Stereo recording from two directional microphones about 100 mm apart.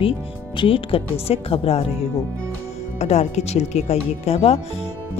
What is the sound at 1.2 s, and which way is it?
Speech, 80° left.